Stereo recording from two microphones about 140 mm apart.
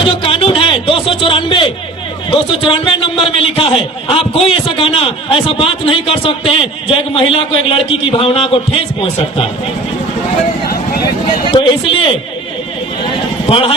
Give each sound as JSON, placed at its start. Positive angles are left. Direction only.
{"t": 0.0, "sound": "a sound", "side_deg": 40}
{"t": 2.3, "sound": "a man's voice", "side_deg": 40}
{"t": 11.4, "sound": "a man's voice", "side_deg": 40}
{"t": 13.5, "sound": "a man's voice", "side_deg": 40}